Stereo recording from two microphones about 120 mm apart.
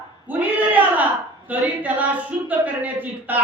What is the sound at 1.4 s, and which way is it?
Speech, 15° right (ahead or behind).